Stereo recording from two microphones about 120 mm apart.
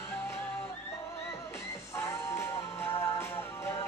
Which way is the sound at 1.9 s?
25° left (ahead or behind).